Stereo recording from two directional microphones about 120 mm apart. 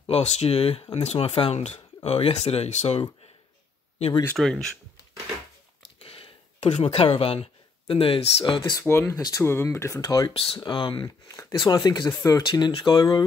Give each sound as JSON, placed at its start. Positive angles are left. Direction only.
{"t": 0.0, "sound": "speech", "side_deg": 55}
{"t": 4.4, "sound": "speech", "side_deg": 5}
{"t": 5.9, "sound": "a sound", "side_deg": 55}
{"t": 7.9, "sound": "speech", "side_deg": 50}
{"t": 9.1, "sound": "speech", "side_deg": 30}
{"t": 10.3, "sound": "speech", "side_deg": 50}
{"t": 11.2, "sound": "speech", "side_deg": 25}